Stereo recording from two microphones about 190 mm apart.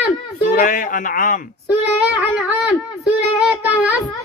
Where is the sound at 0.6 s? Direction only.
45° left (ahead or behind).